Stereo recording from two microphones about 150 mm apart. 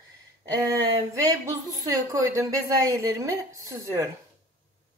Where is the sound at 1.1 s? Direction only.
20° right (ahead or behind).